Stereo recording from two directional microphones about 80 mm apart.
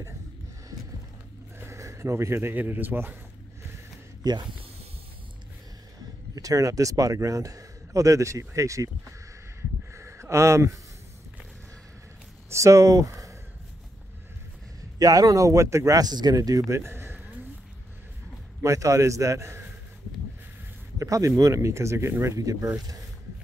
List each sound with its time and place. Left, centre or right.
1.6 s speech: right
4.2 s speech: right
6.3 s a man's voice: right
9.6 s a sound: right
12.4 s speech: right
15.0 s a man's voice: right
16.3 s speech: right
18.6 s speech: right
21.0 s a man's voice: right